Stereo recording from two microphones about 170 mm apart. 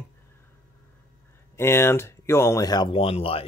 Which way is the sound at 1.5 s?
15° left (ahead or behind).